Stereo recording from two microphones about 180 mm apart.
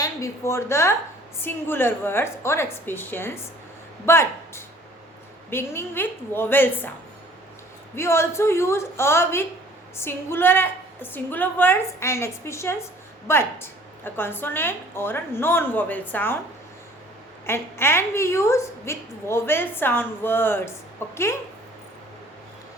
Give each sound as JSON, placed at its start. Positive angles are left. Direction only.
{"t": 0.0, "sound": "a woman's voice", "side_deg": 15}
{"t": 7.9, "sound": "a woman's voice", "side_deg": 15}
{"t": 17.4, "sound": "a woman's voice", "side_deg": 15}